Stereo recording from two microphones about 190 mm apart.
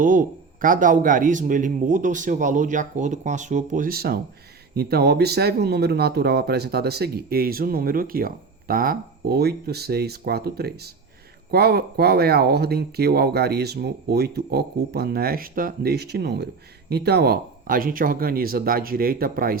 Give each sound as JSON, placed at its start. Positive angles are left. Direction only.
{"t": 0.0, "sound": "speech", "side_deg": -45}